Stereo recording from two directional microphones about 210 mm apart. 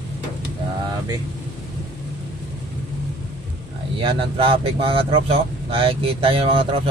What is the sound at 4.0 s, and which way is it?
A man's voice, 25° right (ahead or behind).